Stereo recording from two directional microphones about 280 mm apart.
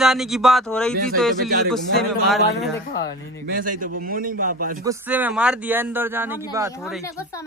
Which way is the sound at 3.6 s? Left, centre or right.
Right.